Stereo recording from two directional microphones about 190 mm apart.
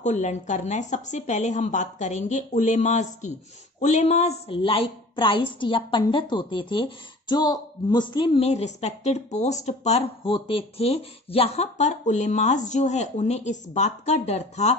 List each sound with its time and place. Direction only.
0.0 s a woman's voice: 35° left (ahead or behind)